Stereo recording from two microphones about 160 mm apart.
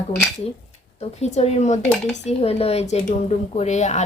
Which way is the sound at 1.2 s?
45° left (ahead or behind).